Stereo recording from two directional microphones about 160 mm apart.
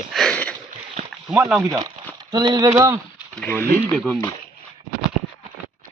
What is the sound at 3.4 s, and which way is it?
Speech, 10° left (ahead or behind).